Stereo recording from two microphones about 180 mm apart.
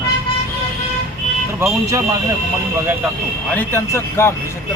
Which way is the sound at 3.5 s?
10° left (ahead or behind).